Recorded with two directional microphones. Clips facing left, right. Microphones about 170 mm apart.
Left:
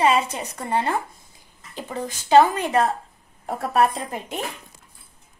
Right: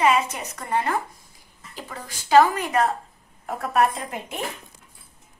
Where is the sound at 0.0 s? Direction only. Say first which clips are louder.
Left 1 dB; 35° left (ahead or behind).